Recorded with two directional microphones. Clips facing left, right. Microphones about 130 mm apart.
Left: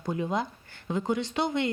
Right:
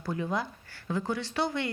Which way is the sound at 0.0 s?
20° left (ahead or behind).